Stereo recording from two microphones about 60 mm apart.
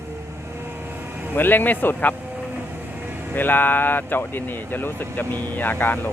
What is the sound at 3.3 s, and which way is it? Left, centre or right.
Speech, left.